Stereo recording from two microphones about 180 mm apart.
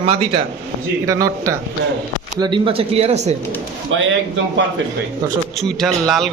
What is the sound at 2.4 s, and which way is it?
Speech, 30° right (ahead or behind).